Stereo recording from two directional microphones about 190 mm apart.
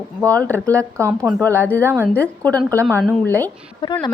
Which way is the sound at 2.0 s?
5° left (ahead or behind).